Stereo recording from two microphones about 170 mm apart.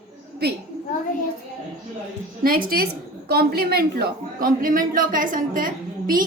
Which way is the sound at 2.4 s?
60° right (ahead or behind).